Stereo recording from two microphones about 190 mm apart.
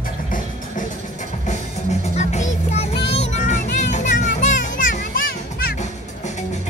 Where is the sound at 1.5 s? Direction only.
40° left (ahead or behind).